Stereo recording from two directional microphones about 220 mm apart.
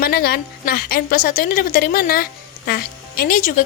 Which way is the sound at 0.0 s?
45° left (ahead or behind).